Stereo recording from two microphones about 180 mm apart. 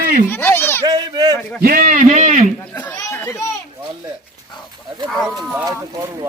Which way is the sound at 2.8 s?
15° left (ahead or behind).